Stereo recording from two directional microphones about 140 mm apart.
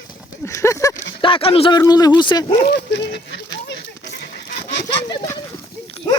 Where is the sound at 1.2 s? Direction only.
40° left (ahead or behind).